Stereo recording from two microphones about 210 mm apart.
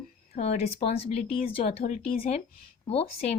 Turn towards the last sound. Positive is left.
turn(degrees=30)  # may be behind; listen again after turning